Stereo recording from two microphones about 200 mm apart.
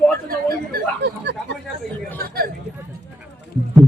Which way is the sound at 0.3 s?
55° right (ahead or behind).